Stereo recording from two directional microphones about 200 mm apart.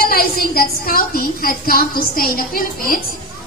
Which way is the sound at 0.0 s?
45° left (ahead or behind).